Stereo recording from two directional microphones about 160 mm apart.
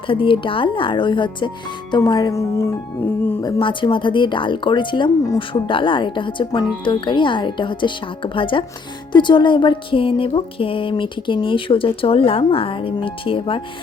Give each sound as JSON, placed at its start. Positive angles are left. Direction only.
{"t": 0.1, "sound": "speech", "side_deg": 35}
{"t": 3.4, "sound": "speech", "side_deg": 30}